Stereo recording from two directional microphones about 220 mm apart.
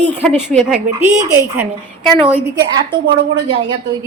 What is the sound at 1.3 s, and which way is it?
Speech, 15° right (ahead or behind).